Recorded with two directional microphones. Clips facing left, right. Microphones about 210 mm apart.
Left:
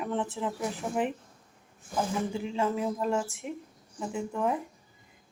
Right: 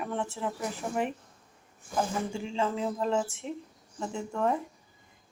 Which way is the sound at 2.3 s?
15° left (ahead or behind).